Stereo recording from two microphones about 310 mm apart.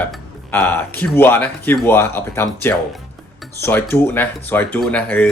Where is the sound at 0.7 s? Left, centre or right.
Centre.